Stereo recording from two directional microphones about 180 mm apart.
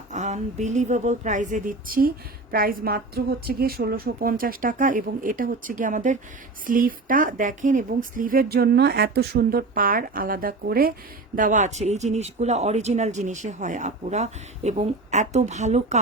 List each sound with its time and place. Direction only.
0.1 s speech: 40° right (ahead or behind)
11.3 s speech: 45° right (ahead or behind)